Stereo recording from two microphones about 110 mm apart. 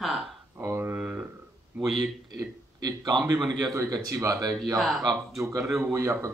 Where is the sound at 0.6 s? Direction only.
20° right (ahead or behind).